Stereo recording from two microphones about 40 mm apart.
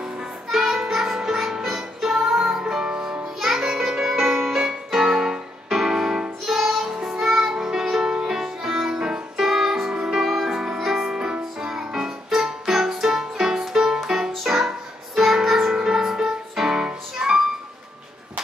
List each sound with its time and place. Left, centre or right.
0.5 s music: centre
2.6 s music: right
3.3 s music: centre
6.4 s music: centre
8.9 s music: right
9.4 s music: centre
10.2 s music: centre